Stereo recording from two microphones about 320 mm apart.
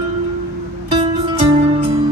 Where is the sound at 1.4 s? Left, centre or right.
Centre.